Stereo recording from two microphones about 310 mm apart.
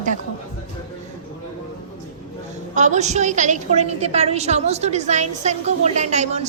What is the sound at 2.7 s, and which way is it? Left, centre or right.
A woman's voice, right.